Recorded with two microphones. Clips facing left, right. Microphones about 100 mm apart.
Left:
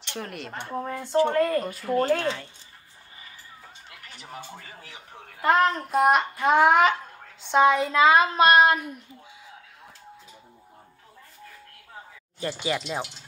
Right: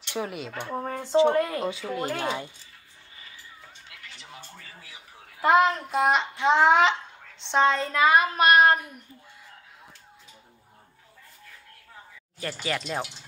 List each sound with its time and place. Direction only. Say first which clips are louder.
0.1 s child singing: right 4 dB; 5° right (ahead or behind)
0.7 s speech: left 1 dB; 25° right (ahead or behind)
1.1 s speech: even; 10° right (ahead or behind)
1.6 s child singing: left 1 dB; centre (ahead or behind)
2.0 s speech: left 8 dB; 15° right (ahead or behind)
5.4 s child singing: right 1 dB; centre (ahead or behind)
7.0 s speech: left 2 dB; 5° left (ahead or behind); by 8.7 s 25° left (ahead or behind)
12.4 s speech: left 2 dB; 20° left (ahead or behind)